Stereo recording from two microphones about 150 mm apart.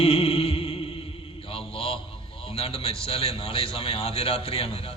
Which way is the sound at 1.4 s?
40° left (ahead or behind).